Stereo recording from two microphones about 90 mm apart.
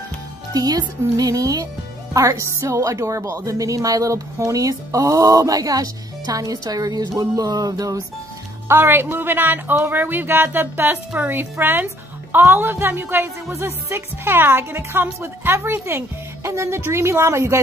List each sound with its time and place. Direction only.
0.5 s speech: 45° right (ahead or behind)
8.6 s speech: 25° right (ahead or behind)